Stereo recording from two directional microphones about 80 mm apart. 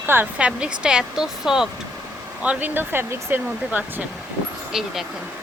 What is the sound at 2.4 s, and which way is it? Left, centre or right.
Speech, centre.